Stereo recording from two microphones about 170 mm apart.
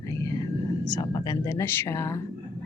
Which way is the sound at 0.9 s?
25° left (ahead or behind).